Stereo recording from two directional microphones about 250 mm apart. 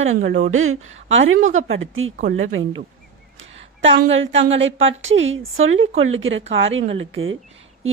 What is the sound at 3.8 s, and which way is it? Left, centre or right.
A woman's voice, right.